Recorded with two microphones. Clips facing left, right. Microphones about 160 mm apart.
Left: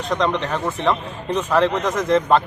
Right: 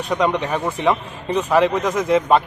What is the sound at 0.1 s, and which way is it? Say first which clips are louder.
Speech: right 1 dB; 10° right (ahead or behind).